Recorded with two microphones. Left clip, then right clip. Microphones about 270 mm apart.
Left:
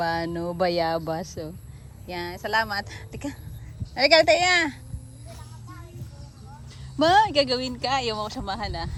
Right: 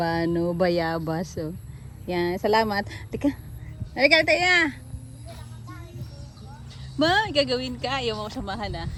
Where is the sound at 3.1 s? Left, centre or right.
Centre.